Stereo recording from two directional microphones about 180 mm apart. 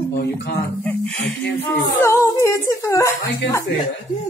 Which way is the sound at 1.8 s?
20° left (ahead or behind).